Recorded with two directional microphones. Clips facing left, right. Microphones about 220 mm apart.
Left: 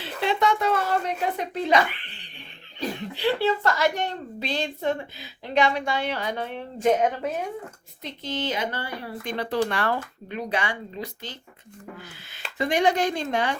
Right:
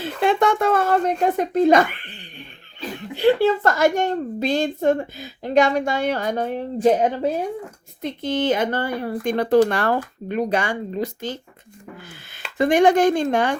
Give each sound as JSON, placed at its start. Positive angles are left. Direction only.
{"t": 0.0, "sound": "a woman's voice", "side_deg": -50}
{"t": 8.0, "sound": "a woman's voice", "side_deg": -50}
{"t": 12.5, "sound": "a woman's voice", "side_deg": -50}